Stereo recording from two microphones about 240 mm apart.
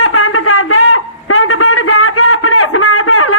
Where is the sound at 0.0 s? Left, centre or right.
Left.